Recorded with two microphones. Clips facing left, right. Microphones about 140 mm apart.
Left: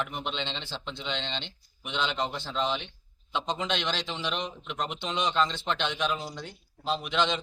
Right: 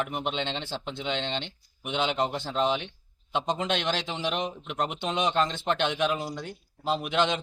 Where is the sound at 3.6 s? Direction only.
50° right (ahead or behind).